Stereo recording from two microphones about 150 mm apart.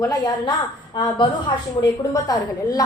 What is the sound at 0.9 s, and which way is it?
A woman's voice, 30° left (ahead or behind).